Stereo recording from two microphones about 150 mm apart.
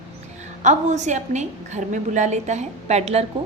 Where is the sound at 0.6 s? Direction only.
50° right (ahead or behind).